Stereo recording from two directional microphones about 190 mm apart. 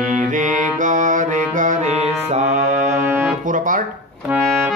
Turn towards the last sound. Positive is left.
turn(degrees=-10)  # may be behind; listen again after turning